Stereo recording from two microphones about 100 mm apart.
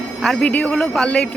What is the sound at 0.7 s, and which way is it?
Speech, centre (ahead or behind).